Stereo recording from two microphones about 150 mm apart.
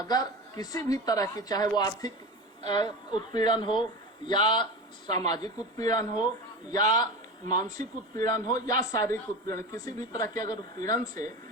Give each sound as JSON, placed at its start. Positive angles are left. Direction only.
{"t": 0.0, "sound": "a man's voice", "side_deg": 25}